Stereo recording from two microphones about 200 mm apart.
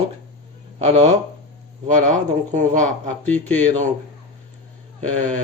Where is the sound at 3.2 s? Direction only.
10° left (ahead or behind).